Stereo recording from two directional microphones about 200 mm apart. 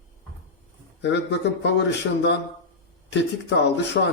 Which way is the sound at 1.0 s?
60° left (ahead or behind).